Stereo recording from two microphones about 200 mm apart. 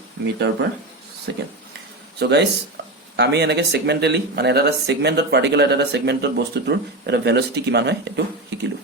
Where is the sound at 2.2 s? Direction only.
55° right (ahead or behind).